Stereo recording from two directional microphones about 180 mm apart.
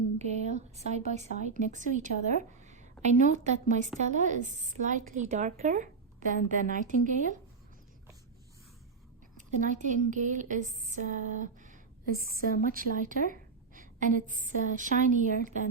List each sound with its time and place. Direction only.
0.2 s a woman's voice: 40° right (ahead or behind)
9.6 s a woman's voice: 45° right (ahead or behind)